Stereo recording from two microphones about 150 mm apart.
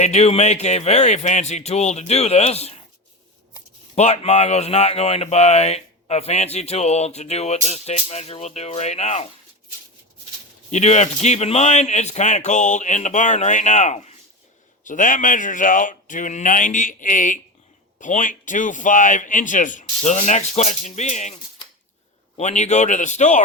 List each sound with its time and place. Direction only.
0.0 s speech: 45° left (ahead or behind)
3.9 s speech: 45° left (ahead or behind)
10.7 s speech: 50° left (ahead or behind)
14.8 s speech: 60° left (ahead or behind)
22.4 s speech: 50° left (ahead or behind)